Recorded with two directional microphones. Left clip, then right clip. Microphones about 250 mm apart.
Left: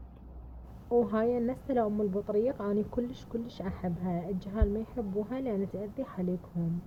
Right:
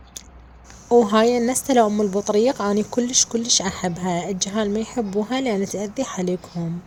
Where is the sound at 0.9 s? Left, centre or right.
Right.